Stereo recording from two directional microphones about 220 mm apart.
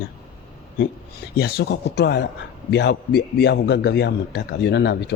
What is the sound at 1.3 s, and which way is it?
A man's voice, 45° left (ahead or behind).